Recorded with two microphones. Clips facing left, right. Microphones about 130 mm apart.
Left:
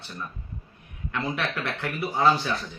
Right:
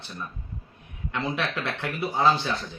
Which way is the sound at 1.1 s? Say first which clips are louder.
Even; 20° right (ahead or behind).